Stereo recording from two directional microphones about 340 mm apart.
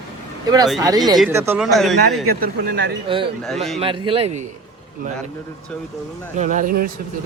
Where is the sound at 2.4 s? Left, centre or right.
Right.